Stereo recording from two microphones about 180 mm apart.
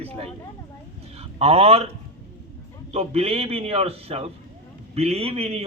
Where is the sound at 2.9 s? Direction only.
35° right (ahead or behind).